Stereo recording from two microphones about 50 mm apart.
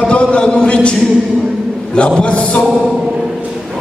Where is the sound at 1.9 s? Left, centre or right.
Left.